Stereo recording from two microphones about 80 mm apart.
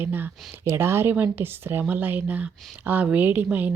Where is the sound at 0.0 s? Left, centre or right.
Right.